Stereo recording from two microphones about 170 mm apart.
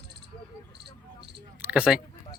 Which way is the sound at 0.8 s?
80° right.